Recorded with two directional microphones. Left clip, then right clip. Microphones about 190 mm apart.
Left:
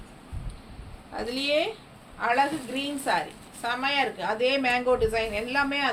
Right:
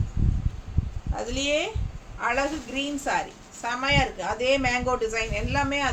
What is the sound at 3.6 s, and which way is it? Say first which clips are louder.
Speech: right 2 dB; 15° right (ahead or behind).